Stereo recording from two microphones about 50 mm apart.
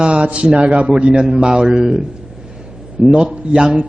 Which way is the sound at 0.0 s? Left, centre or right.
Right.